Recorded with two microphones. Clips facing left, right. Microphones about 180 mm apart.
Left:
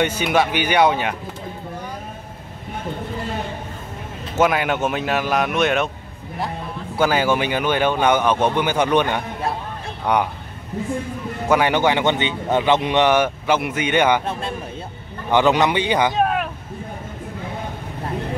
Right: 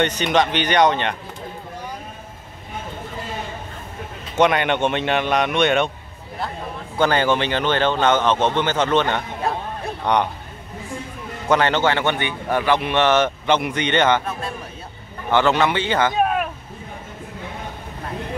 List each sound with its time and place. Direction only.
0.0 s a man's voice: 10° left (ahead or behind)
4.4 s speech: 5° left (ahead or behind)
7.0 s a man's voice: 5° left (ahead or behind)
11.4 s a man's voice: 10° left (ahead or behind)
15.3 s a man's voice: 15° left (ahead or behind)
16.1 s a sound: 5° right (ahead or behind)